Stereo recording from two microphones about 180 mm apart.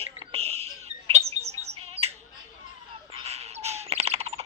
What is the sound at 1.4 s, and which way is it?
Bird, 35° right (ahead or behind).